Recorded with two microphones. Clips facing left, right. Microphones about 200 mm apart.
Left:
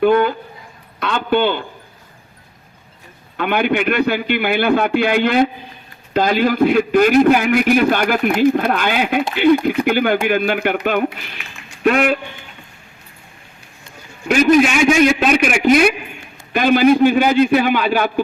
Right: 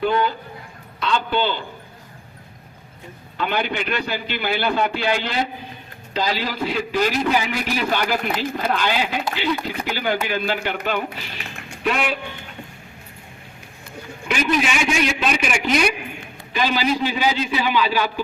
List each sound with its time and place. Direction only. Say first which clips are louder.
0.0 s a man's voice: left 7 dB; 55° left (ahead or behind)
3.3 s a man's voice: left 7 dB; 55° left (ahead or behind)
14.3 s a man's voice: left 9 dB; 45° left (ahead or behind)